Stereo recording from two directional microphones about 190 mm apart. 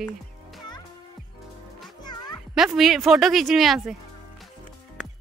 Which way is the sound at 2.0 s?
20° left (ahead or behind).